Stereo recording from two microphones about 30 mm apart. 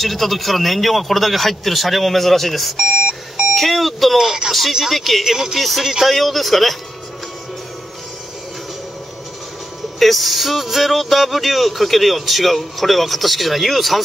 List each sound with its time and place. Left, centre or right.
0.0 s speech: centre
4.2 s speech: centre
4.8 s speech: centre
5.2 s speech: centre
5.6 s speech: centre
9.9 s speech: centre